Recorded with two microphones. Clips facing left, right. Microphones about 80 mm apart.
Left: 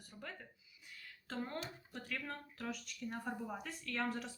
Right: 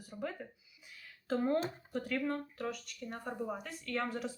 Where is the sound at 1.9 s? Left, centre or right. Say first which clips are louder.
Right 10 dB; centre.